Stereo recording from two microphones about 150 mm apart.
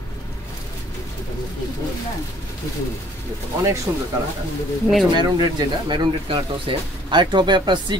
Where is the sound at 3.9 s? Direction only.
20° right (ahead or behind).